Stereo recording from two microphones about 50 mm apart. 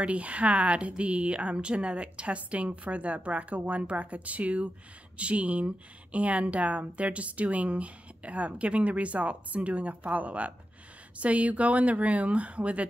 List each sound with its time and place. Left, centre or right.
0.0 s speech: right